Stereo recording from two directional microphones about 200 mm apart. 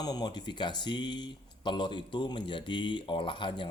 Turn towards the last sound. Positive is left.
turn(degrees=25)  # may be behind; listen again after turning